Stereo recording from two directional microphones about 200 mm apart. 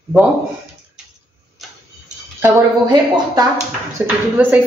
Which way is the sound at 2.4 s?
15° right (ahead or behind).